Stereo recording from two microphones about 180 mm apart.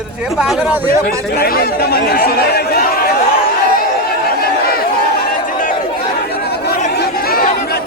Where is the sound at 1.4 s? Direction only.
60° left (ahead or behind).